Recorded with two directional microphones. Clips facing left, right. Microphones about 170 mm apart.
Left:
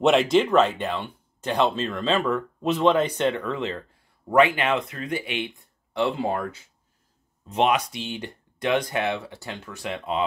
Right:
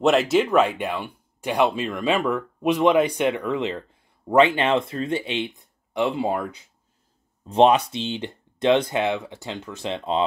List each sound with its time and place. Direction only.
0.0 s speech: centre (ahead or behind); by 6.7 s 20° right (ahead or behind)
7.4 s speech: 30° right (ahead or behind)